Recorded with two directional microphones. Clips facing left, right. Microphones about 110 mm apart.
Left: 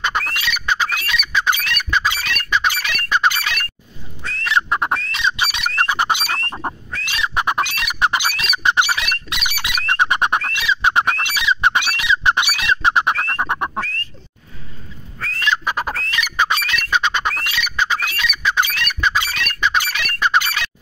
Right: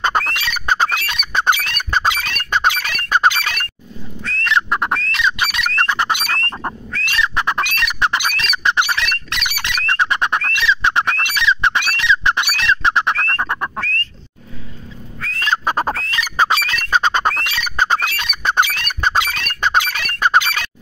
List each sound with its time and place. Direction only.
0.1 s bird: 40° right (ahead or behind)
2.5 s squawk: 45° right (ahead or behind)
4.2 s bird: 5° left (ahead or behind)
7.7 s squawk: 10° left (ahead or behind)
15.1 s fowl: centre (ahead or behind)
15.4 s bird: 40° right (ahead or behind)
16.1 s fowl: 35° right (ahead or behind)
17.6 s bird: 45° right (ahead or behind)
19.1 s squawk: 50° right (ahead or behind)